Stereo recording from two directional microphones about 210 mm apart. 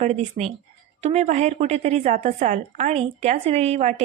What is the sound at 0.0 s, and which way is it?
A woman's voice, 30° right (ahead or behind).